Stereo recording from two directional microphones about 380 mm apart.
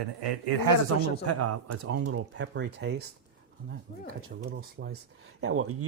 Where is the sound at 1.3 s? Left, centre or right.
Right.